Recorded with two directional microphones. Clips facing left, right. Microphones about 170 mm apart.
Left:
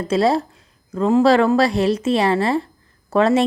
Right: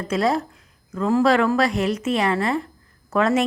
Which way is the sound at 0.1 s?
30° left (ahead or behind).